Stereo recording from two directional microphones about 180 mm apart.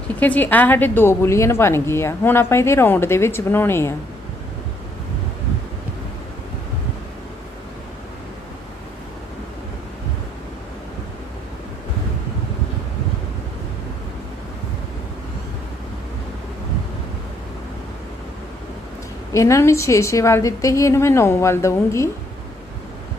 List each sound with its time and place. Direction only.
0.2 s a woman's voice: 10° left (ahead or behind)
19.3 s a woman's voice: 15° left (ahead or behind)